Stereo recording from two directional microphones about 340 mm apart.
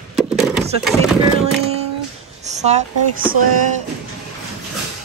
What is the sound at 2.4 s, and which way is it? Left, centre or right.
Speech, centre.